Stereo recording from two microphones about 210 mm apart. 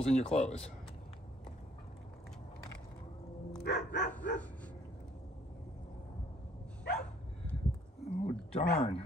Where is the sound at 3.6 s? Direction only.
45° left (ahead or behind).